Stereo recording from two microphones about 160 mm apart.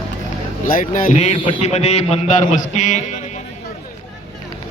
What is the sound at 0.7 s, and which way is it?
Speech, 60° left (ahead or behind).